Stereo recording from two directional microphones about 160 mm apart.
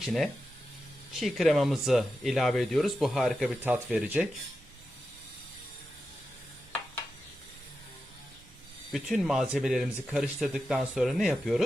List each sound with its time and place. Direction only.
0.0 s speech: centre (ahead or behind)
8.9 s speech: centre (ahead or behind)